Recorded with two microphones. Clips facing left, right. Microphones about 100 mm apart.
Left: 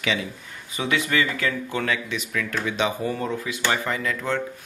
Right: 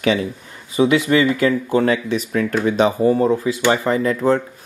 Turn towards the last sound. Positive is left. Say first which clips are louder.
# right 9 dB
turn(degrees=-35)  # may be behind; listen again after turning